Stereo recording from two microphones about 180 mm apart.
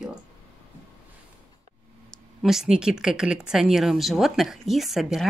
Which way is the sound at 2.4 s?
Centre (ahead or behind).